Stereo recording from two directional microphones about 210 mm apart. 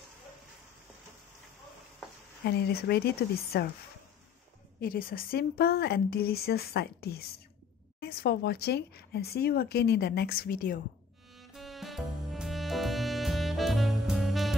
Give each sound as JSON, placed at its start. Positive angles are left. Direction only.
{"t": 2.4, "sound": "speech", "side_deg": 50}
{"t": 4.7, "sound": "speech", "side_deg": 45}
{"t": 11.3, "sound": "music", "side_deg": 0}